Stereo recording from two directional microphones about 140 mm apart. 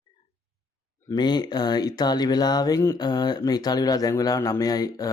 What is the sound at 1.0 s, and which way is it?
Speech, 30° left (ahead or behind).